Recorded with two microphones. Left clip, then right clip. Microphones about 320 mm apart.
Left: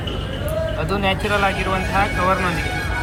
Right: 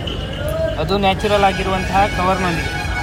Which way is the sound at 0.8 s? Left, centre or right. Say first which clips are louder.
Right 5 dB; centre.